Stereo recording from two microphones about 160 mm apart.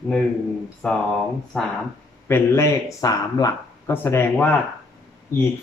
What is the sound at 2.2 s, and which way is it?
Speech, 15° left (ahead or behind).